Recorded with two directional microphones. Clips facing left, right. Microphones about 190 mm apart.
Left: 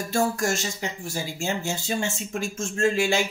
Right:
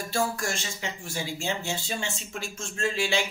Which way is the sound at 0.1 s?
45° left (ahead or behind).